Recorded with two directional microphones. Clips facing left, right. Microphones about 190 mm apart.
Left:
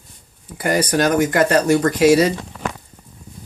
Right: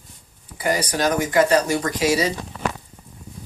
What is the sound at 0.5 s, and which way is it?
Speech, 55° left (ahead or behind).